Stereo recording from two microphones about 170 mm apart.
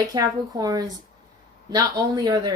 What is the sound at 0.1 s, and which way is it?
Speech, 20° right (ahead or behind).